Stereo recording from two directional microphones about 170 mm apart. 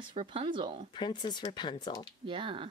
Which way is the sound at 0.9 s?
25° left (ahead or behind).